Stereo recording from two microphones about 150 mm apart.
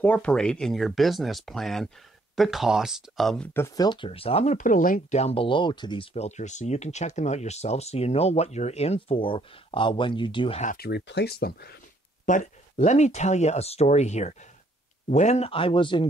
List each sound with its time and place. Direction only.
0.0 s speech: 10° left (ahead or behind)
3.5 s speech: 20° left (ahead or behind); by 4.6 s 40° left (ahead or behind)
4.6 s speech: 60° left (ahead or behind)
5.2 s speech: 40° left (ahead or behind)
6.1 s speech: 50° left (ahead or behind); by 10.6 s 35° left (ahead or behind)
10.6 s speech: 75° left (ahead or behind)
12.3 s speech: 55° left (ahead or behind); by 16.1 s 35° left (ahead or behind)